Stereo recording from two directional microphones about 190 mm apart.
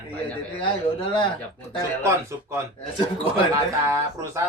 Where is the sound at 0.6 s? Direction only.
25° left (ahead or behind).